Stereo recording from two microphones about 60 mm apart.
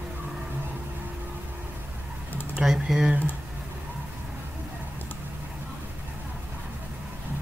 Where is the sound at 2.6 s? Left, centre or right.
Centre.